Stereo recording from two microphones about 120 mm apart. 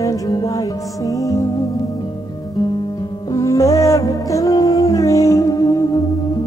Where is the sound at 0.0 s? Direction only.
30° left (ahead or behind).